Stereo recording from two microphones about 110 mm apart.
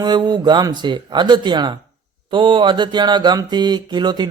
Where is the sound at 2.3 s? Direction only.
50° right (ahead or behind).